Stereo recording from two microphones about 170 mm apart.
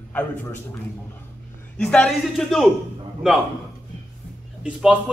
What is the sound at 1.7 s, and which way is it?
Speech, 5° left (ahead or behind).